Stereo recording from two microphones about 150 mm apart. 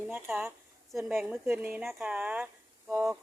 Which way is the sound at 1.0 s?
5° right (ahead or behind).